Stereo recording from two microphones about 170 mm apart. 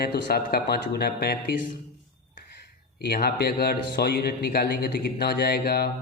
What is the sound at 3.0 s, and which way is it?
A man's voice, 70° left (ahead or behind).